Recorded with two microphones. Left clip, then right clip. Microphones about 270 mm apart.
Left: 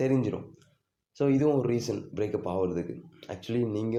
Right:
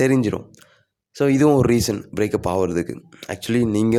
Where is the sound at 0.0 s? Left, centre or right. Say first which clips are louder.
Right 9 dB; right.